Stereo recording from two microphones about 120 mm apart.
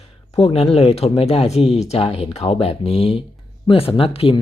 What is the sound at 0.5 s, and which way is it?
Speech, 60° left (ahead or behind).